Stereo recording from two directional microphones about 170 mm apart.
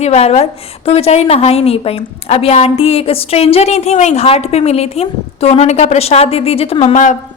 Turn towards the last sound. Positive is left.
turn(degrees=45)  # may be behind; listen again after turning